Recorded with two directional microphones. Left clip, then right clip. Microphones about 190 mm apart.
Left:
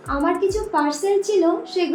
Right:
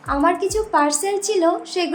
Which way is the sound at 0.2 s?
40° right (ahead or behind).